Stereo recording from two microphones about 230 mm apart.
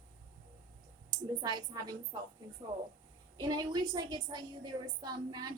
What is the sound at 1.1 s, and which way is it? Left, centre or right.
Speech, centre.